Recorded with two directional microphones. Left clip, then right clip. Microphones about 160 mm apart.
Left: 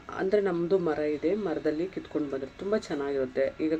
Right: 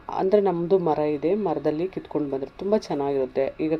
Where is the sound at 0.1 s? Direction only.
20° right (ahead or behind).